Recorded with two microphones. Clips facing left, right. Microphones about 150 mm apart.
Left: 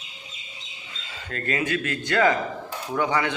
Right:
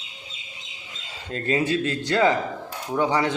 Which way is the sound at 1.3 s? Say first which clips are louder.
Right 3 dB; 30° right (ahead or behind).